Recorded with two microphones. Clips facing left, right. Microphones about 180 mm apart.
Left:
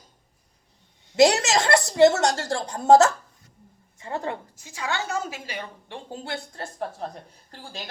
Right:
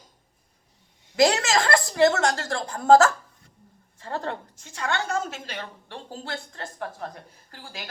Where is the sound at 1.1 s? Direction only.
25° left (ahead or behind).